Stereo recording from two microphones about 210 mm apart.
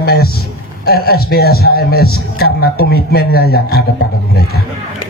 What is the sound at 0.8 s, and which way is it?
A man's voice, 45° left (ahead or behind).